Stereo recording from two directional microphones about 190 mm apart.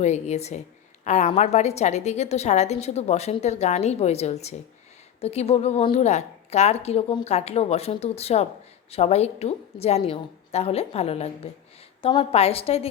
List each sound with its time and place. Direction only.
0.0 s a woman's voice: 35° left (ahead or behind)